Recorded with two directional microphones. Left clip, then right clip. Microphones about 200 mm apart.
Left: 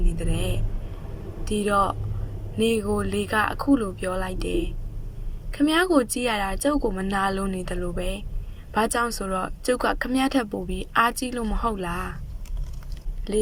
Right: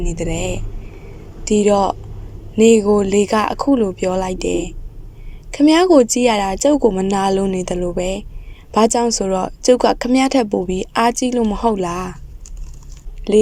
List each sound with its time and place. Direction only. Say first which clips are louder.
0.0 s a woman's voice: right 9 dB; 15° right (ahead or behind)